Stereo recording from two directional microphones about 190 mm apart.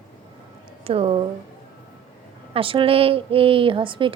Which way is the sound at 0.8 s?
30° right (ahead or behind).